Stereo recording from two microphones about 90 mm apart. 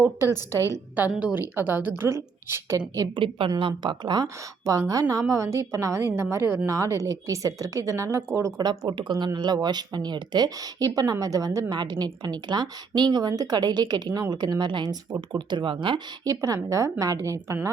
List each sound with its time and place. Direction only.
0.0 s a woman's voice: 30° right (ahead or behind)
0.9 s a woman's voice: 15° right (ahead or behind)
2.7 s speech: 40° right (ahead or behind)
3.2 s a woman's voice: 75° right (ahead or behind)
3.6 s speech: 65° right (ahead or behind)
4.6 s a woman's voice: 40° right (ahead or behind)
8.9 s speech: 60° right (ahead or behind); by 11.6 s 40° right (ahead or behind)
11.7 s speech: 55° right (ahead or behind)
16.2 s speech: 40° right (ahead or behind)